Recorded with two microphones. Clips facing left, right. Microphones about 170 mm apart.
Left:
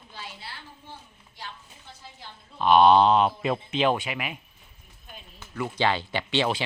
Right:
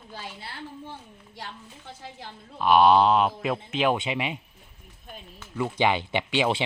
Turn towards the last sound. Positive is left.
turn(degrees=-15)  # may be behind; listen again after turning